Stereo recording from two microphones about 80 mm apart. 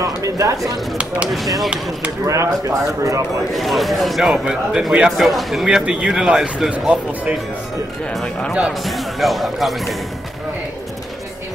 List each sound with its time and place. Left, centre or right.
0.0 s speech: right
1.3 s a man's voice: centre
2.2 s speech: right
3.5 s a man's voice: centre
4.3 s a man's voice: centre
5.9 s speech: centre
8.1 s a man's voice: centre